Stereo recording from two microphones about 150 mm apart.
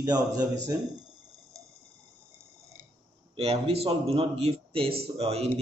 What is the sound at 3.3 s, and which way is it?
Speech, 40° right (ahead or behind).